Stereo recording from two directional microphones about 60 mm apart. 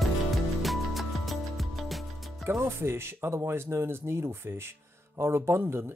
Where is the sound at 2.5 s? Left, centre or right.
Right.